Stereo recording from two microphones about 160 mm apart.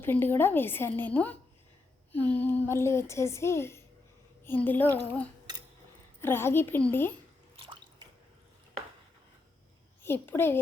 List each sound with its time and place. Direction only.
0.0 s a woman's voice: 15° left (ahead or behind)
6.2 s a woman's voice: 15° left (ahead or behind)
10.0 s a woman's voice: 15° left (ahead or behind)